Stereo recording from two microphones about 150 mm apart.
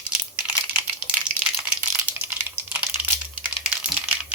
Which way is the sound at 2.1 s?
15° right (ahead or behind).